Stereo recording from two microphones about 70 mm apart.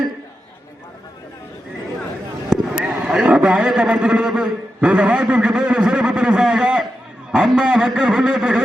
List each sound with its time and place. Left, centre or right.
2.5 s a man's voice: centre